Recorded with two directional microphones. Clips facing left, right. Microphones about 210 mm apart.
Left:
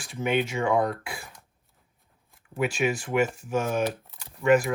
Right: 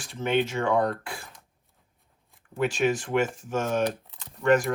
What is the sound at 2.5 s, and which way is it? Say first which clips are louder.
Speech: right 1 dB; 10° left (ahead or behind).